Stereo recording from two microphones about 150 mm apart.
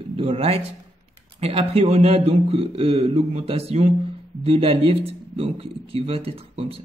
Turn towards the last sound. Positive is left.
turn(degrees=-40)  # may be behind; listen again after turning